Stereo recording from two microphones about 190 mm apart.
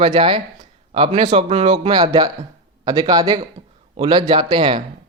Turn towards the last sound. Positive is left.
turn(degrees=-25)  # may be behind; listen again after turning